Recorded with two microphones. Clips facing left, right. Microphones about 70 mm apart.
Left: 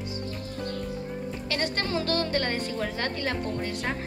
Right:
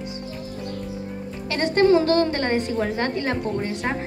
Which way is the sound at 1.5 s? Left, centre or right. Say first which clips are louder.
Right 13 dB; right.